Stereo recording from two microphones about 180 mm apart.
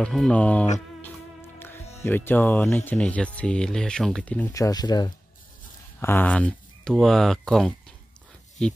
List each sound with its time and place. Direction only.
0.0 s speech: 5° left (ahead or behind)
2.0 s speech: 10° left (ahead or behind)
4.6 s speech: 20° left (ahead or behind); by 8.7 s 5° left (ahead or behind)